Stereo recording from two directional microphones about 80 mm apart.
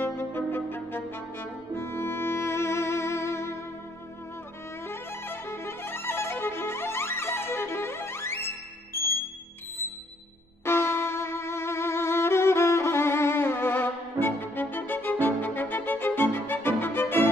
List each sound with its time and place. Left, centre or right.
0.0 s brass instrument: left
4.8 s violin: left
10.6 s music: left